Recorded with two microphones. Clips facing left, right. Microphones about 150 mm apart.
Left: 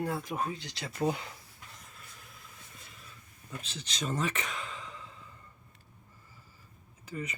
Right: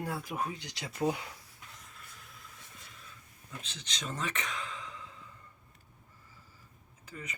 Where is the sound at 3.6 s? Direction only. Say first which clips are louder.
Left 5 dB; 5° left (ahead or behind).